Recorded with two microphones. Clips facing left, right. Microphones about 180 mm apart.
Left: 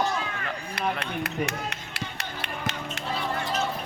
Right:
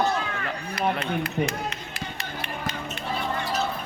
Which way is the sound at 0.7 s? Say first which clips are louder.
Right 4 dB; 65° left (ahead or behind).